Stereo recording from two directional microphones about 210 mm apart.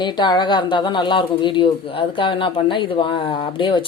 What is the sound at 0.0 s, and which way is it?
Speech, 20° left (ahead or behind).